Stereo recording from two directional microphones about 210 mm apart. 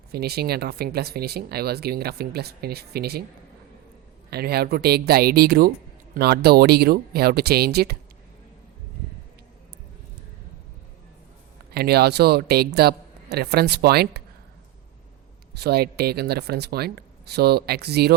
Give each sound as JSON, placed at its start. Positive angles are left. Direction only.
{"t": 0.1, "sound": "speech", "side_deg": -50}
{"t": 4.3, "sound": "speech", "side_deg": -50}
{"t": 11.7, "sound": "speech", "side_deg": -50}
{"t": 15.5, "sound": "speech", "side_deg": -50}